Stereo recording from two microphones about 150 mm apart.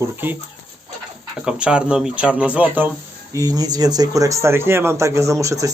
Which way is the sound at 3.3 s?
25° right (ahead or behind).